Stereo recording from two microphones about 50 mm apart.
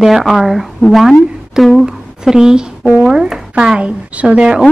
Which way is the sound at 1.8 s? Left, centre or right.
Centre.